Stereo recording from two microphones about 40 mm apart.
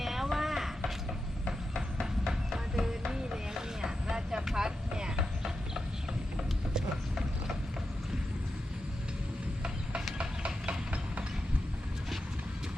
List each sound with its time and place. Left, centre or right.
0.0 s a sound: centre
2.5 s music: centre
3.1 s vehicle: centre
4.4 s clip-clop: centre
6.7 s mechanisms: centre
10.2 s a sound: right